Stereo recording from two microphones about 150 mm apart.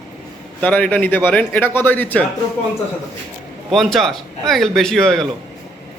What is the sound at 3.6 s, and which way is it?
A man's voice, centre (ahead or behind).